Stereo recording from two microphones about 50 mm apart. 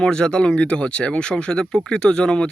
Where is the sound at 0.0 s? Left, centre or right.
Centre.